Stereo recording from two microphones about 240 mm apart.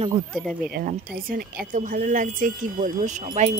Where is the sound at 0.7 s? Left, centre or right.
Right.